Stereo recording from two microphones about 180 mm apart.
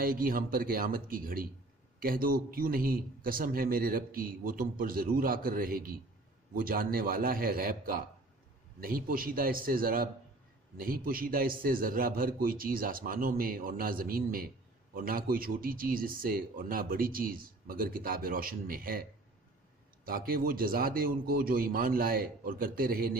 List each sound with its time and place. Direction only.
0.0 s speech: 55° right (ahead or behind)
20.1 s speech: 55° right (ahead or behind)